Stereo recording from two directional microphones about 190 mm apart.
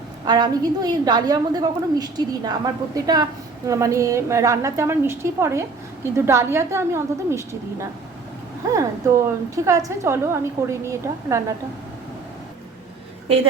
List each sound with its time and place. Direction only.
0.3 s a woman's voice: 20° right (ahead or behind)